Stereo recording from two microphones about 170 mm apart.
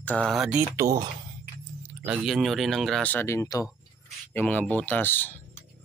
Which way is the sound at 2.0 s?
5° right (ahead or behind).